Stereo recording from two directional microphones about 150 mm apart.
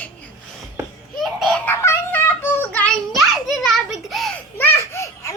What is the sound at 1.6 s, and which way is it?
Child singing, 15° left (ahead or behind).